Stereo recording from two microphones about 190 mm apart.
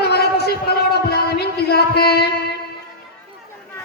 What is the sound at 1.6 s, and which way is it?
Speech, 55° left (ahead or behind).